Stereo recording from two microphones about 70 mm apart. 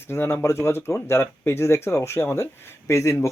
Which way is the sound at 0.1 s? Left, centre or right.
Left.